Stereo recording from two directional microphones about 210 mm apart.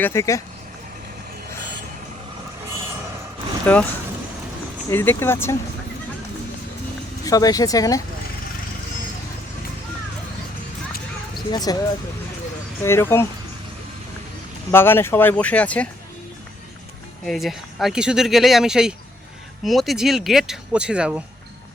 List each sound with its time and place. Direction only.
0.0 s speech: 15° left (ahead or behind)
3.7 s speech: 5° left (ahead or behind)
4.9 s speech: 10° left (ahead or behind)
7.3 s speech: 15° left (ahead or behind)
11.3 s speech: 20° left (ahead or behind)
12.8 s speech: 10° left (ahead or behind)
14.7 s speech: 10° left (ahead or behind)
17.2 s speech: centre (ahead or behind)